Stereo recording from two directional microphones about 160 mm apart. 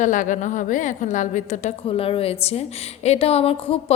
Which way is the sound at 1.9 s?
35° left (ahead or behind).